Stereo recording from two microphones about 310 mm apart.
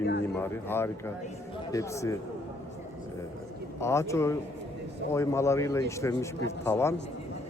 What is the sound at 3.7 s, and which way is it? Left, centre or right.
A man's voice, centre.